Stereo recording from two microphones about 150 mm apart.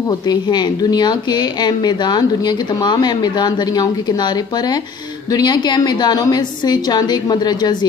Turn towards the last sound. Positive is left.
turn(degrees=30)  # may be behind; listen again after turning